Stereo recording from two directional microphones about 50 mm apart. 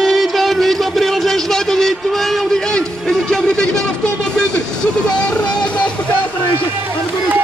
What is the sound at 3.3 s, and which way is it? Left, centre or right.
Vehicle, centre.